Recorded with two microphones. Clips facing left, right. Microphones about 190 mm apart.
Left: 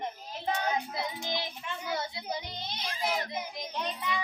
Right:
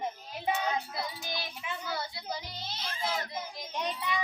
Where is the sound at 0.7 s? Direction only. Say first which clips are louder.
Left 2 dB; 20° left (ahead or behind).